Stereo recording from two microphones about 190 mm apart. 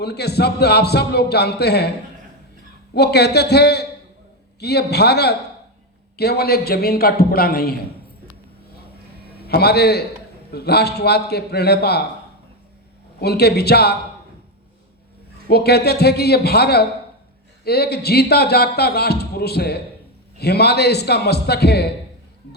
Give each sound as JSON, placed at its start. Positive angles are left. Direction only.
{"t": 0.0, "sound": "speech", "side_deg": 60}
{"t": 2.9, "sound": "a man's voice", "side_deg": 60}
{"t": 9.5, "sound": "speech", "side_deg": 60}
{"t": 13.1, "sound": "speech", "side_deg": 60}
{"t": 15.4, "sound": "speech", "side_deg": 55}